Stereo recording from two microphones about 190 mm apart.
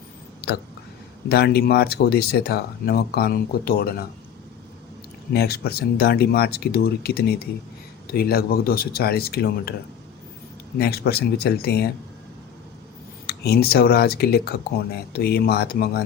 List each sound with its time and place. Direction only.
0.4 s speech: 60° left (ahead or behind)
5.3 s speech: 55° left (ahead or behind)
10.8 s speech: 55° left (ahead or behind)
13.2 s speech: 55° left (ahead or behind)